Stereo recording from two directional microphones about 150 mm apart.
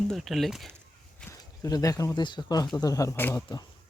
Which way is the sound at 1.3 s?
25° left (ahead or behind).